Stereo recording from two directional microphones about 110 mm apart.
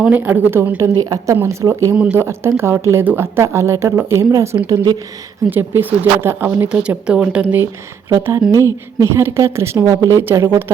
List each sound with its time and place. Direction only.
0.0 s speech: 15° right (ahead or behind)
0.9 s a woman's voice: 35° right (ahead or behind)
5.5 s speech: 20° right (ahead or behind)
9.0 s speech: 25° right (ahead or behind)